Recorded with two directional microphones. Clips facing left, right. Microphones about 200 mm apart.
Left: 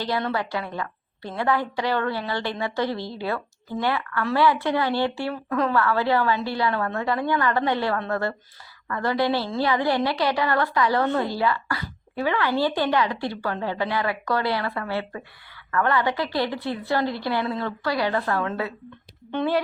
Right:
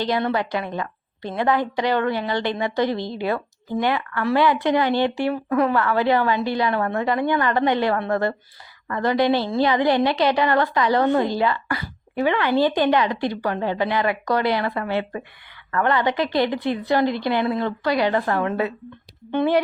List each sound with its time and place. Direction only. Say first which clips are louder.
0.0 s a woman's voice: right 4 dB; 20° right (ahead or behind)